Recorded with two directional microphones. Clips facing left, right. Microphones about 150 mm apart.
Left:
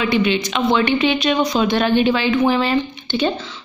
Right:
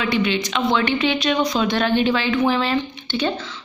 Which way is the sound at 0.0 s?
15° left (ahead or behind).